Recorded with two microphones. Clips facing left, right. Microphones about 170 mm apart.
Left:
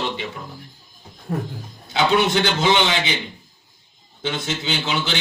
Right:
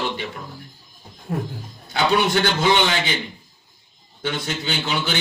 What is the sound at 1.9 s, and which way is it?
A man's voice, 20° left (ahead or behind).